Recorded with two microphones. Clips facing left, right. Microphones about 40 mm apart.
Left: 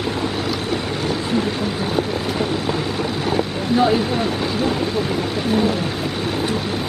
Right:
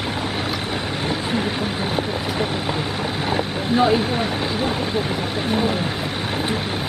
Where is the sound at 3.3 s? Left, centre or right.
Centre.